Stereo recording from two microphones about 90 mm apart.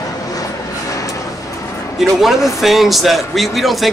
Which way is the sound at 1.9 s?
Centre (ahead or behind).